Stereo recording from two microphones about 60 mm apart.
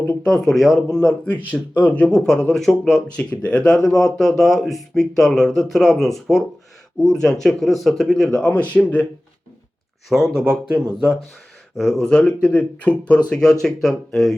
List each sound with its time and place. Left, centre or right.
0.3 s speech: centre
0.9 s speech: centre
1.5 s speech: left
2.0 s speech: centre
3.2 s speech: left
3.8 s speech: centre
8.7 s speech: left
10.1 s speech: centre
12.0 s speech: centre
13.3 s speech: centre